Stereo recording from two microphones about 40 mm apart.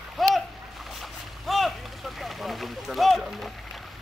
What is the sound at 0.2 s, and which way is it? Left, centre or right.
Splash, centre.